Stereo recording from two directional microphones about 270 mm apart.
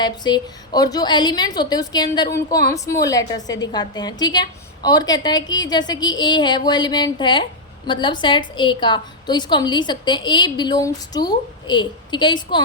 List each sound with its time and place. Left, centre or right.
0.0 s a woman's voice: centre